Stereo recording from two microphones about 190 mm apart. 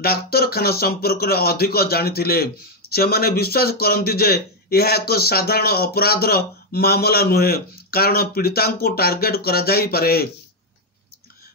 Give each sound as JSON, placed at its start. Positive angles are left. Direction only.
{"t": 0.0, "sound": "speech", "side_deg": 55}